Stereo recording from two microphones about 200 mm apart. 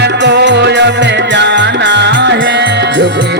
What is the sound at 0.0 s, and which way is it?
Music, 60° right (ahead or behind).